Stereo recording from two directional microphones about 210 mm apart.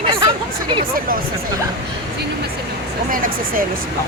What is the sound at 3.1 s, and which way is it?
Speech, 40° right (ahead or behind).